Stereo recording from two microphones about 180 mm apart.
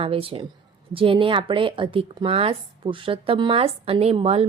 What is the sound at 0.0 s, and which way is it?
A woman's voice, 30° right (ahead or behind).